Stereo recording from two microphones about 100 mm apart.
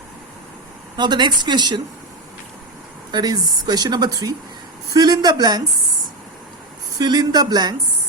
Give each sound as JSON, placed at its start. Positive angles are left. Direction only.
{"t": 0.9, "sound": "speech", "side_deg": -45}
{"t": 3.1, "sound": "speech", "side_deg": -45}
{"t": 7.0, "sound": "speech", "side_deg": -45}